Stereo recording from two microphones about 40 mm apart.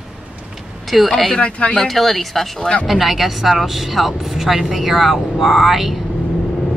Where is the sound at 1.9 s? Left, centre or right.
Centre.